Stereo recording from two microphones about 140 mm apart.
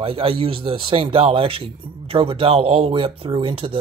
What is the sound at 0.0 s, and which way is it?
Speech, 40° right (ahead or behind).